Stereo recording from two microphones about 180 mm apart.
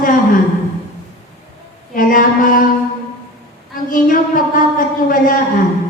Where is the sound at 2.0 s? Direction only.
50° left (ahead or behind).